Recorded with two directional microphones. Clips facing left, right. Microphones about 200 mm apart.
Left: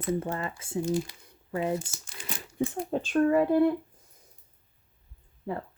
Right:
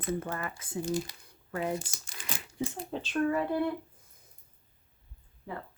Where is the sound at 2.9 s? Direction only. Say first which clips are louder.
Left 6 dB; 45° left (ahead or behind).